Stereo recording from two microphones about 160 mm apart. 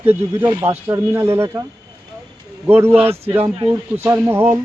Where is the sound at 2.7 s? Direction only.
15° right (ahead or behind).